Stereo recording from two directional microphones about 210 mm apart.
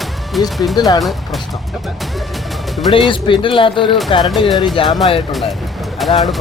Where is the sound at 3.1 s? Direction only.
25° left (ahead or behind).